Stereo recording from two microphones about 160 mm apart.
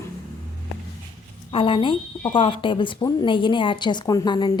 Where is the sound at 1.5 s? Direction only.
35° left (ahead or behind).